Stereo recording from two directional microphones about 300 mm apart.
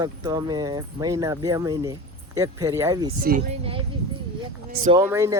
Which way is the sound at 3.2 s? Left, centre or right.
Right.